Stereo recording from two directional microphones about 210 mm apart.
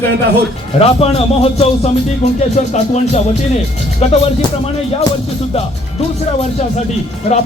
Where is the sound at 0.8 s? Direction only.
30° left (ahead or behind).